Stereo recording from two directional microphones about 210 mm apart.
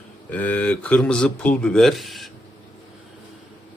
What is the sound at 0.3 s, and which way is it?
Speech, 5° left (ahead or behind).